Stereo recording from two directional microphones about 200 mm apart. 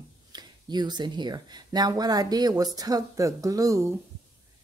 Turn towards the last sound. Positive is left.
turn(degrees=-15)  # may be behind; listen again after turning